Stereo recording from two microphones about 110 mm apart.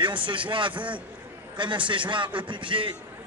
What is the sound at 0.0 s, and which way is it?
A man's voice, 50° right (ahead or behind).